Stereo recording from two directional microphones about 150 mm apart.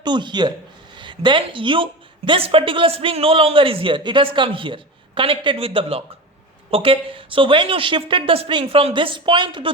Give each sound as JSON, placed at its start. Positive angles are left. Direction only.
{"t": 0.0, "sound": "a woman's voice", "side_deg": -30}